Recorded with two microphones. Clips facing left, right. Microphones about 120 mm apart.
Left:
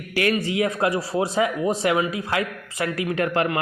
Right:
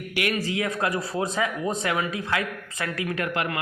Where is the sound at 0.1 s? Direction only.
35° left (ahead or behind).